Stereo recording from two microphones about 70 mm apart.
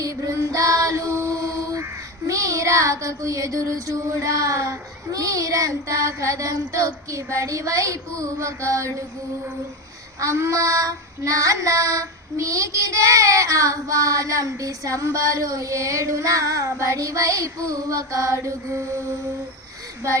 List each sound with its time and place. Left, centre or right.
0.0 s female singing: right
10.2 s child singing: right